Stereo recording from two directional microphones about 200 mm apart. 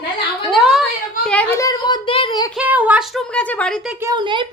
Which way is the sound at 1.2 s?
10° left (ahead or behind).